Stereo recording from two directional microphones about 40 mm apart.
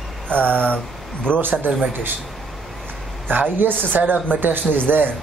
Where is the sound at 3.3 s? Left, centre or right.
Right.